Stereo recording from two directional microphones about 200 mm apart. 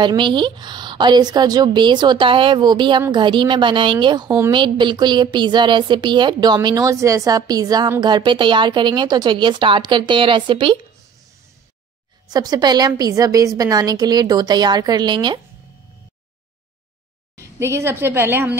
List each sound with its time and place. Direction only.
0.0 s speech: 25° right (ahead or behind)
12.3 s speech: 20° right (ahead or behind)
17.4 s a woman's voice: 15° right (ahead or behind)